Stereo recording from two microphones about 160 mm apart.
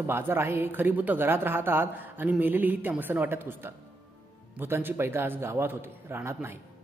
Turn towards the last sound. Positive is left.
turn(degrees=-15)  # may be behind; listen again after turning